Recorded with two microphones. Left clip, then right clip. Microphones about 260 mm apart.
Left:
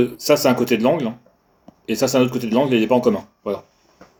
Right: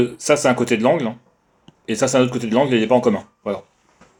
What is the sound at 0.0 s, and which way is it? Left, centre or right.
Speech, right.